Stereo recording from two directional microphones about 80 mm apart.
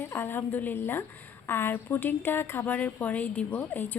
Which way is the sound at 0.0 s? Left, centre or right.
Left.